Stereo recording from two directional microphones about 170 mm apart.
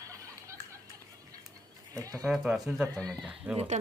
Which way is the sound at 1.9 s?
20° right (ahead or behind).